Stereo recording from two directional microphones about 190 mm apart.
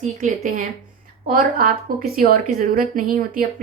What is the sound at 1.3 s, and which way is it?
A woman's voice, 45° right (ahead or behind).